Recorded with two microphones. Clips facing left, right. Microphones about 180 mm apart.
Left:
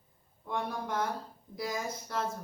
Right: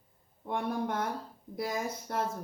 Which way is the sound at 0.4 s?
60° right (ahead or behind).